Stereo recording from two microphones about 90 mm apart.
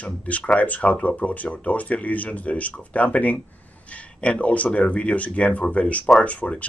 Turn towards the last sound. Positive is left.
turn(degrees=15)  # may be behind; listen again after turning